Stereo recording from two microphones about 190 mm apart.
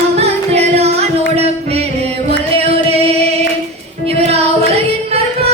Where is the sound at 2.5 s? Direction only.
30° right (ahead or behind).